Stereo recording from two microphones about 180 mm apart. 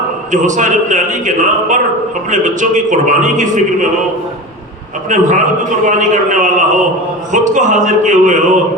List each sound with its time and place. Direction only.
0.3 s a man's voice: 45° right (ahead or behind)
5.0 s a man's voice: 45° right (ahead or behind)